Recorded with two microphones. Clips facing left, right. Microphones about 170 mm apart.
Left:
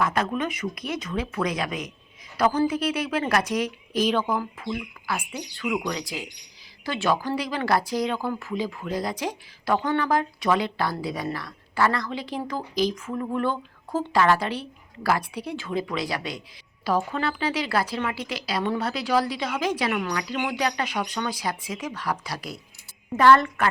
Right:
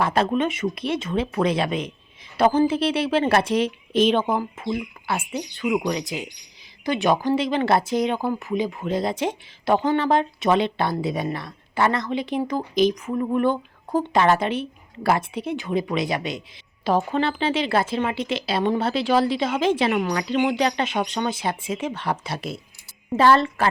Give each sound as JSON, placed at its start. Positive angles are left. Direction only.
{"t": 0.0, "sound": "speech", "side_deg": -30}